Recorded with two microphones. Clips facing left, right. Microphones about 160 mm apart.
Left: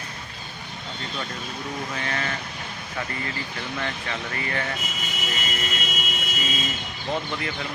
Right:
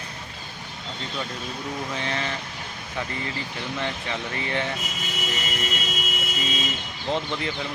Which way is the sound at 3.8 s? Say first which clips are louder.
Right 2 dB; 20° right (ahead or behind).